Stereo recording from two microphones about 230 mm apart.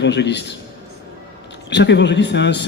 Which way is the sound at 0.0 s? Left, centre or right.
Left.